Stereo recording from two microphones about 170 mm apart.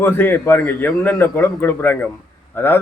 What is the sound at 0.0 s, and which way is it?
A man's voice, 15° left (ahead or behind).